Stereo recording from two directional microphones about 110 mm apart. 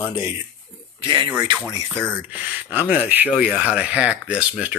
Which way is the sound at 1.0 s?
50° right (ahead or behind).